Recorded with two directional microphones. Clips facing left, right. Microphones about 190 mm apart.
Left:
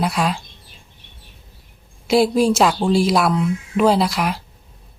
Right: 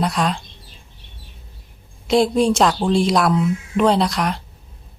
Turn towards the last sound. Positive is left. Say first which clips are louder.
# even
turn(degrees=5)  # may be behind; listen again after turning